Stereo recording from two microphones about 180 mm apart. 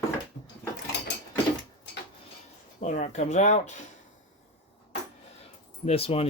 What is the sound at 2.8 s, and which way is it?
Speech, 45° left (ahead or behind).